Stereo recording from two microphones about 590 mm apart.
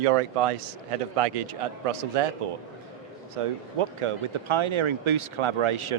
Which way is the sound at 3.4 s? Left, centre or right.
Right.